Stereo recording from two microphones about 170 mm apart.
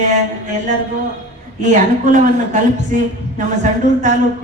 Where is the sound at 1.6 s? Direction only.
45° right (ahead or behind).